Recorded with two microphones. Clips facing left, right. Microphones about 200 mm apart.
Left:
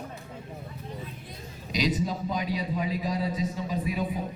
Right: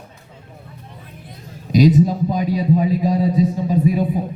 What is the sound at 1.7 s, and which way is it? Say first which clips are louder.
A man's voice: right 14 dB; 45° right (ahead or behind).